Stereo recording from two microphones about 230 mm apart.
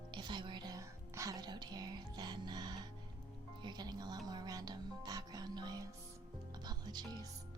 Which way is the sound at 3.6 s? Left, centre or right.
Centre.